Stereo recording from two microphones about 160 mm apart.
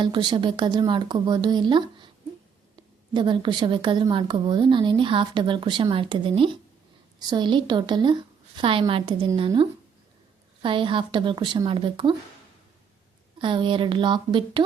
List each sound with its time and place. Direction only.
0.0 s a woman's voice: 30° right (ahead or behind)
13.4 s speech: 30° right (ahead or behind)